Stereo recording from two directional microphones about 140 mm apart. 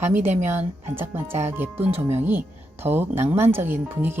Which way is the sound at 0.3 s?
55° right (ahead or behind).